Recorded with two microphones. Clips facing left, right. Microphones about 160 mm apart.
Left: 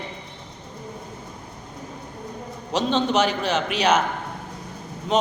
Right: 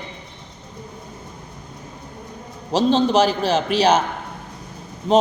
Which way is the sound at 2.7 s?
35° right (ahead or behind).